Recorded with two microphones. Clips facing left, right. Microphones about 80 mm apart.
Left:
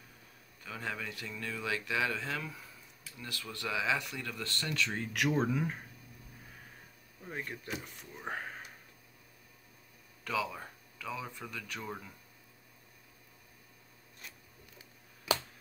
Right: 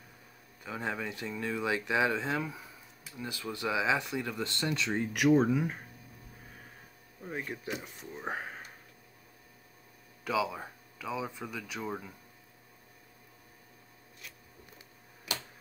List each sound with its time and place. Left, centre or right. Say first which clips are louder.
0.7 s speech: right 4 dB; right; by 5.8 s centre
7.2 s speech: right 3 dB; centre
10.2 s speech: right 4 dB; centre